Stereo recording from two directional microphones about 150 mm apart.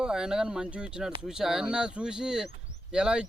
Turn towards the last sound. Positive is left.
turn(degrees=-5)  # may be behind; listen again after turning